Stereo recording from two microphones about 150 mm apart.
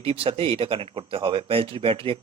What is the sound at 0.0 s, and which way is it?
A man's voice, 40° right (ahead or behind).